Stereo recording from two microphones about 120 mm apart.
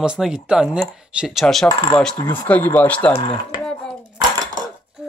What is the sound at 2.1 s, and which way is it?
Speech, 20° left (ahead or behind).